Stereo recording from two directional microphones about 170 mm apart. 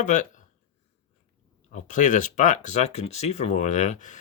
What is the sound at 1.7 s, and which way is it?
Speech, 45° left (ahead or behind).